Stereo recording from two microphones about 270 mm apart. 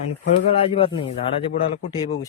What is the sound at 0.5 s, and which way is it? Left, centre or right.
A man's voice, left.